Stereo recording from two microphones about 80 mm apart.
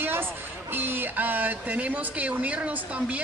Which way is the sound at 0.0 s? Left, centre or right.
Right.